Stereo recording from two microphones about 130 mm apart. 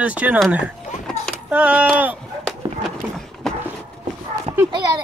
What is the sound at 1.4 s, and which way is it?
Speech, 10° right (ahead or behind).